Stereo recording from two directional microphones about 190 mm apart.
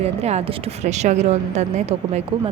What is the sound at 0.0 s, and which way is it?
A woman's voice, 35° right (ahead or behind).